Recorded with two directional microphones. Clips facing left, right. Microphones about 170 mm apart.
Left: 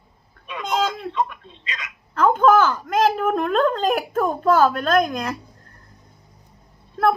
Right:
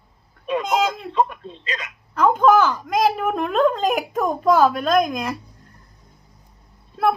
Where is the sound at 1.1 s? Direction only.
35° right (ahead or behind).